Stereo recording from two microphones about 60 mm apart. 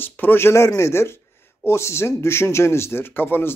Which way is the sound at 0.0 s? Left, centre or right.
Left.